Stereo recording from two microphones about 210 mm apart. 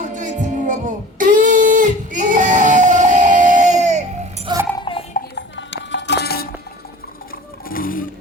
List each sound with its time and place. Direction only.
0.0 s music: 35° right (ahead or behind)
4.5 s music: 20° right (ahead or behind)
5.1 s music: 55° left (ahead or behind)
7.3 s roaring cats: 40° left (ahead or behind)